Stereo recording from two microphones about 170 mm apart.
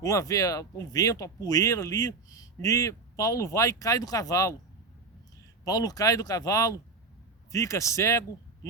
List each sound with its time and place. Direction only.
0.0 s speech: 20° left (ahead or behind)
5.6 s speech: 20° left (ahead or behind)